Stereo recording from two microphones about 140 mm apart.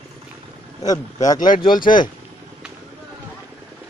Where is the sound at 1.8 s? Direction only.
70° left (ahead or behind).